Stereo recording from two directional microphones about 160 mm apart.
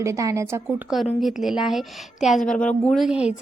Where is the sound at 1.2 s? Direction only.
Centre (ahead or behind).